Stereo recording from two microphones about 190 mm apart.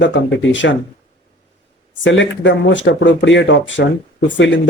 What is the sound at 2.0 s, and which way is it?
Speech, 75° left (ahead or behind).